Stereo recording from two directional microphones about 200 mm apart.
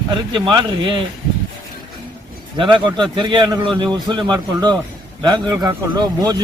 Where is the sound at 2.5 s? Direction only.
25° right (ahead or behind).